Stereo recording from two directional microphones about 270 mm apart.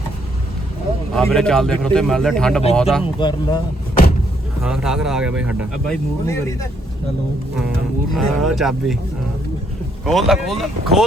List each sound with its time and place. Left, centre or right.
1.1 s speech: centre
3.2 s speech: centre
4.6 s speech: centre
8.1 s speech: centre
10.1 s speech: centre